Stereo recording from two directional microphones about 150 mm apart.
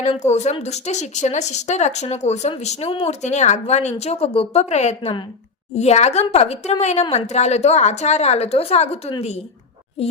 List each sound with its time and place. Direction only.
0.2 s speech: 50° left (ahead or behind)